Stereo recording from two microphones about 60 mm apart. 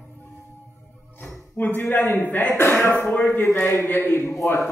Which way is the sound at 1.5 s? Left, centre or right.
Left.